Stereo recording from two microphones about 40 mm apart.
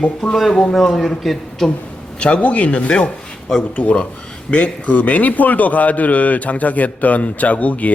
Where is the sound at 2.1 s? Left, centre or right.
Left.